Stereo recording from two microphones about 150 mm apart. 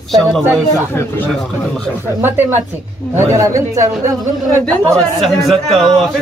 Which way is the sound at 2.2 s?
15° right (ahead or behind).